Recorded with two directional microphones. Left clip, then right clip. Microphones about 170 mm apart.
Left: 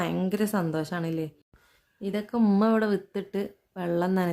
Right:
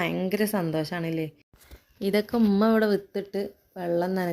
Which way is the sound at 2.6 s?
10° right (ahead or behind).